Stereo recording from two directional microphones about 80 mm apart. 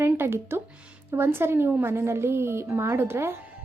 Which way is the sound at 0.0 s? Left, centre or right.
Right.